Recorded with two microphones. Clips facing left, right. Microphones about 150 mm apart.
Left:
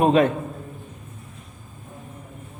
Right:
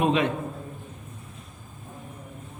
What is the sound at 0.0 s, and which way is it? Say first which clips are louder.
Speech: left 6 dB; 45° left (ahead or behind).